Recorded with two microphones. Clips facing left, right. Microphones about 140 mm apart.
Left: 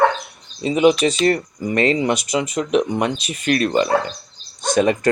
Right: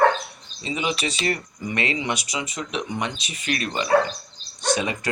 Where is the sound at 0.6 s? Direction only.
50° left (ahead or behind).